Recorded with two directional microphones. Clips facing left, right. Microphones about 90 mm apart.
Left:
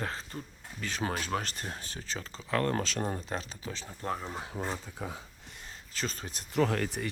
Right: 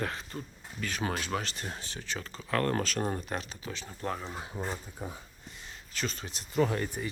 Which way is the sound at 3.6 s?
45° right (ahead or behind).